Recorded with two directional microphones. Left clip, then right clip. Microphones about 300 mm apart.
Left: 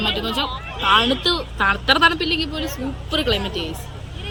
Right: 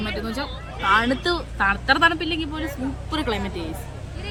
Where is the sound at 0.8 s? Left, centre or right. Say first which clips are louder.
Left 3 dB; centre.